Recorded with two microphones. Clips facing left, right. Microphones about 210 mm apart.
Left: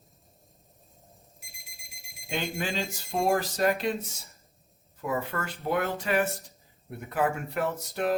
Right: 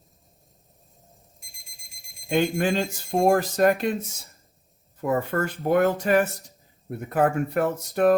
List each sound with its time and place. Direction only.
2.3 s speech: 55° right (ahead or behind)
4.9 s speech: 50° right (ahead or behind)